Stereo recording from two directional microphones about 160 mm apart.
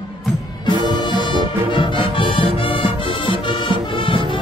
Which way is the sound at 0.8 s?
30° left (ahead or behind).